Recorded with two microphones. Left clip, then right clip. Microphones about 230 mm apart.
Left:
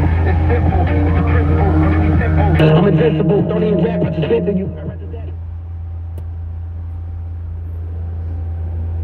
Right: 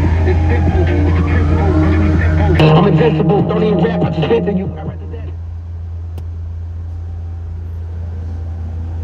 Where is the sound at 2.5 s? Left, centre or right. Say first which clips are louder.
Right 3 dB; centre.